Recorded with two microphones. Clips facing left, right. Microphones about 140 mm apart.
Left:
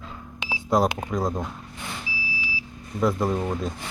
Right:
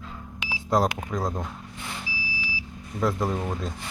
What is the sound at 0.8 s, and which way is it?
Speech, 25° left (ahead or behind).